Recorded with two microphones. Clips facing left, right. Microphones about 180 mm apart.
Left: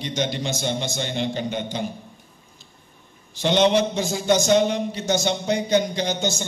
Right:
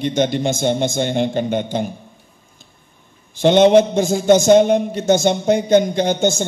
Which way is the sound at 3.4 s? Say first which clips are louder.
Right 8 dB; 50° right (ahead or behind).